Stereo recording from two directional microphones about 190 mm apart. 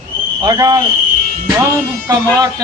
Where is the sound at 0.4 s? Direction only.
20° right (ahead or behind).